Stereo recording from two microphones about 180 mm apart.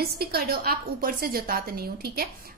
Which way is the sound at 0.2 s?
60° right (ahead or behind).